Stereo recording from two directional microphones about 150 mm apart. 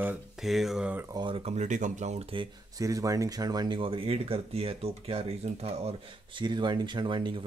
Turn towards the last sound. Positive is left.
turn(degrees=-35)  # may be behind; listen again after turning